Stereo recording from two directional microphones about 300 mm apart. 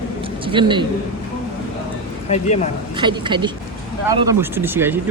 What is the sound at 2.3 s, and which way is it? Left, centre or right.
Speech, left.